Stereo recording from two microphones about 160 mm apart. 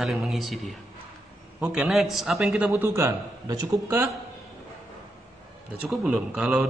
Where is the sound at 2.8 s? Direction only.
15° right (ahead or behind).